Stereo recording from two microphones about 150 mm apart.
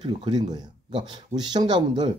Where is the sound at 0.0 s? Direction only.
30° right (ahead or behind).